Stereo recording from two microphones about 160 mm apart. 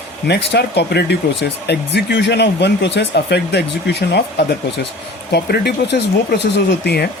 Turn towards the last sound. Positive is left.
turn(degrees=90)